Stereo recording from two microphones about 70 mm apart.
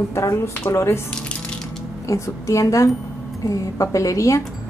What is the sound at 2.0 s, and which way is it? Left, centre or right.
Speech, left.